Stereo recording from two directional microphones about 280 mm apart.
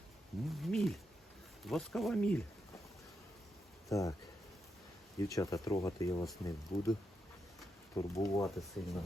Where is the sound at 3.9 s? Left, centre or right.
Centre.